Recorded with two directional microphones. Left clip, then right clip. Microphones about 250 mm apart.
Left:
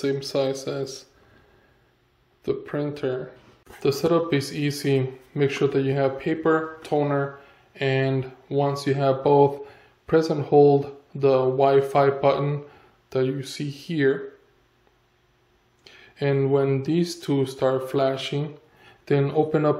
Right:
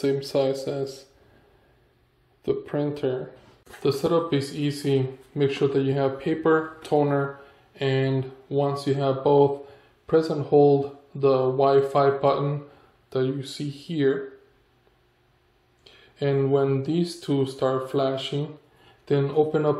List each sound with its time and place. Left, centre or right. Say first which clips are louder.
0.0 s speech: right 1 dB; centre
2.4 s speech: right 1 dB; centre
3.8 s speech: left 1 dB; centre
15.8 s speech: left 1 dB; centre